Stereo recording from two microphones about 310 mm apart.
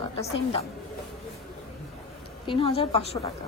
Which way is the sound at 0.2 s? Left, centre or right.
Centre.